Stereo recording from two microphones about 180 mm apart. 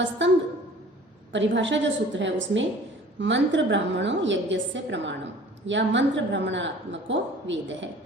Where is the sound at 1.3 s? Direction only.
90° right.